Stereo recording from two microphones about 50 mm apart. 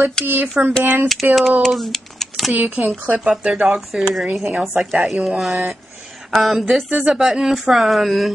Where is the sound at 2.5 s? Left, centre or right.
Right.